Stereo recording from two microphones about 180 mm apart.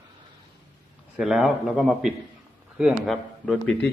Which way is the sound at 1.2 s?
5° right (ahead or behind).